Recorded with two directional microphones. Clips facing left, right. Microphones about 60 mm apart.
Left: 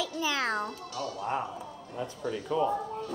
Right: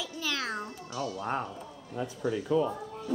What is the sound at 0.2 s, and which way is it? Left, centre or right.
Speech, right.